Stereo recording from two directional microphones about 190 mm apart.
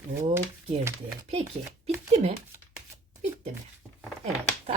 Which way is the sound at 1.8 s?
35° right (ahead or behind).